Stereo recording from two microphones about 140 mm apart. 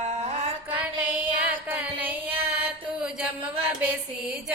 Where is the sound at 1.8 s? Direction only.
10° right (ahead or behind).